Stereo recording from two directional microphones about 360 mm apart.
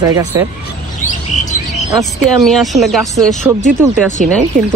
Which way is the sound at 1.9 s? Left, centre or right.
Centre.